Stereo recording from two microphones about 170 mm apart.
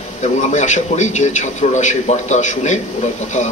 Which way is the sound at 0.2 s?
45° left (ahead or behind).